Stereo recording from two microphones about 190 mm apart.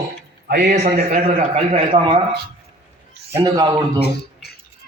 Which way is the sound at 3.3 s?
20° right (ahead or behind).